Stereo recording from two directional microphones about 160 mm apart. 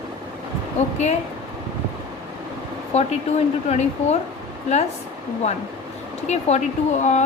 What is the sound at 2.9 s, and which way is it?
Speech, 45° left (ahead or behind).